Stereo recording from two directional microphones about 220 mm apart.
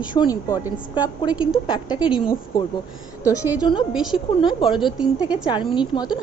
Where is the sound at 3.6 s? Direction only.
20° left (ahead or behind).